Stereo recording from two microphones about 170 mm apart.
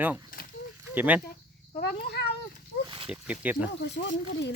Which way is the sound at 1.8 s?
70° left (ahead or behind).